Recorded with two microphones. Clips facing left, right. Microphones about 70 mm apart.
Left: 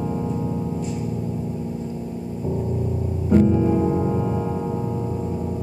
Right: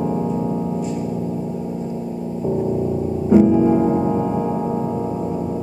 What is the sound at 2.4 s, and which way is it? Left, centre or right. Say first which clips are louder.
Music: right 6 dB; right.